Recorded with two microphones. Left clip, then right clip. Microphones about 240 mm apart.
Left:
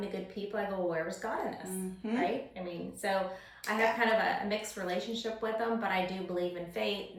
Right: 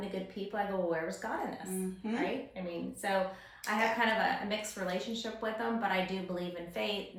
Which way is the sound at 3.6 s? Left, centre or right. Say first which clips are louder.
Left 1 dB; centre.